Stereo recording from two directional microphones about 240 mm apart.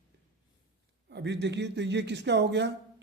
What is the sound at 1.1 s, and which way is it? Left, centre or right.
A man's voice, right.